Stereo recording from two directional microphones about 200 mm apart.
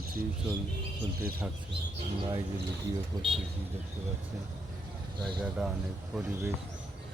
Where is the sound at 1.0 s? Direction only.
50° right (ahead or behind).